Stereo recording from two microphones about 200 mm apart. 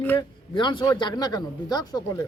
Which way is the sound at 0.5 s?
25° left (ahead or behind).